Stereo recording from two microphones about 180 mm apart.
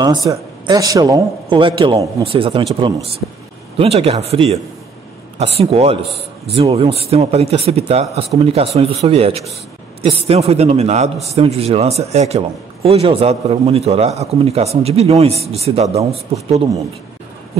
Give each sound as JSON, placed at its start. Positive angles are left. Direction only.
{"t": 0.0, "sound": "a man's voice", "side_deg": -20}
{"t": 5.6, "sound": "a man's voice", "side_deg": -35}